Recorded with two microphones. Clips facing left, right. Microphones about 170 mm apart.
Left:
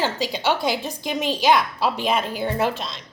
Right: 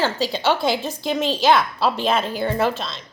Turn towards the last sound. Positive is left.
turn(degrees=15)  # may be behind; listen again after turning